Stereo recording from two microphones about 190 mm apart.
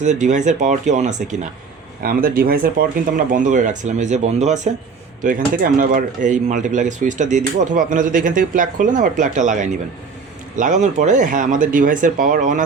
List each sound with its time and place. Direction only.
0.0 s speech: 40° right (ahead or behind)
2.0 s speech: 50° right (ahead or behind)